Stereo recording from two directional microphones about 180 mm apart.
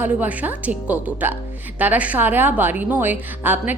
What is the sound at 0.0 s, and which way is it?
A woman's voice, 10° right (ahead or behind).